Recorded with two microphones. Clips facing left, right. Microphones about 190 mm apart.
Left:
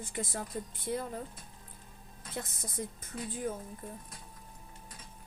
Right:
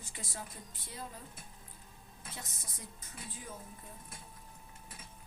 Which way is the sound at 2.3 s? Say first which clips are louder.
Left 13 dB; 55° left (ahead or behind).